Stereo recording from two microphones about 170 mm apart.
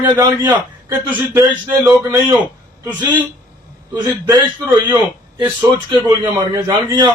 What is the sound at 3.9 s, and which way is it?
A man's voice, 10° right (ahead or behind).